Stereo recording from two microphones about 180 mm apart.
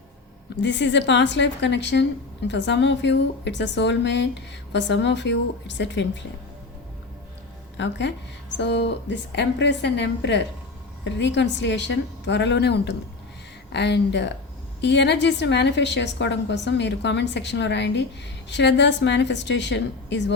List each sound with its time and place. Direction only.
0.6 s a woman's voice: 80° left
7.8 s a woman's voice: 80° left